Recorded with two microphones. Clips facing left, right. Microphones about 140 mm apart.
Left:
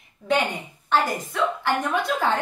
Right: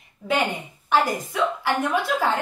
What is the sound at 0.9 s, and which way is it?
A woman's voice, 10° right (ahead or behind).